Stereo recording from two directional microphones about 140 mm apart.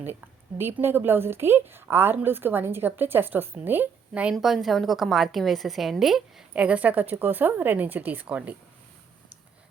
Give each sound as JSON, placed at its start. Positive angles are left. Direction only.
{"t": 0.6, "sound": "a woman's voice", "side_deg": -15}